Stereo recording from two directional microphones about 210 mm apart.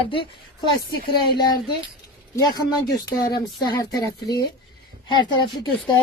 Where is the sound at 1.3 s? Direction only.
20° left (ahead or behind).